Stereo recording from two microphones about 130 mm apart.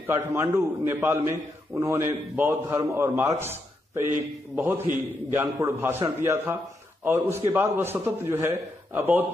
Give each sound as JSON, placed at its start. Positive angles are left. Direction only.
{"t": 0.0, "sound": "a man's voice", "side_deg": -20}